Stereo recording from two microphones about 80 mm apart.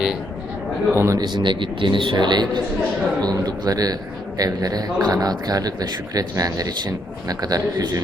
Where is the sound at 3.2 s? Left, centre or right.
Right.